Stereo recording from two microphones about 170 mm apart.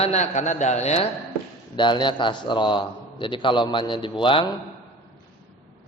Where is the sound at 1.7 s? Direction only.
25° left (ahead or behind).